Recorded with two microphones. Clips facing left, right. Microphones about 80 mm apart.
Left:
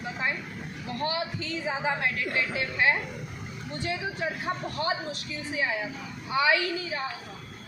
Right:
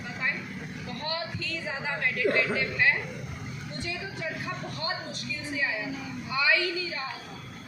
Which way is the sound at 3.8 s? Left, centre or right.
Left.